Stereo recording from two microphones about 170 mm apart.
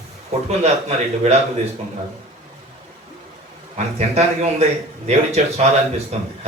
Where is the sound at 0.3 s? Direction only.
40° right (ahead or behind).